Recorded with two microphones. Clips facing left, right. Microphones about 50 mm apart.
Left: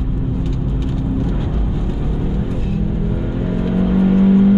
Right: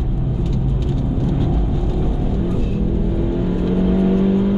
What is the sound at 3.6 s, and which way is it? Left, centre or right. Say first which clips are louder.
Vehicle: left 2 dB; centre.